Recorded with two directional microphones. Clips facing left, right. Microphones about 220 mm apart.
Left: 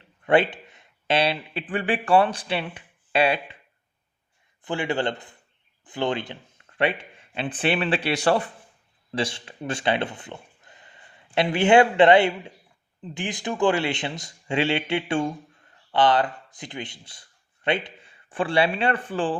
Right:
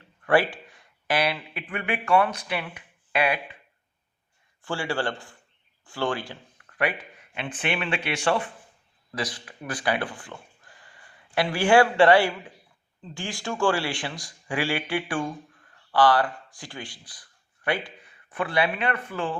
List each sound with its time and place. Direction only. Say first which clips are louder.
0.0 s speech: left 2 dB; 20° left (ahead or behind)
4.6 s speech: left 3 dB; 20° left (ahead or behind)